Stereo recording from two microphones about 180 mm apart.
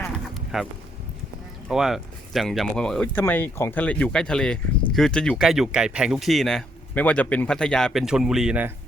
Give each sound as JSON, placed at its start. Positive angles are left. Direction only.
{"t": 0.5, "sound": "speech", "side_deg": 0}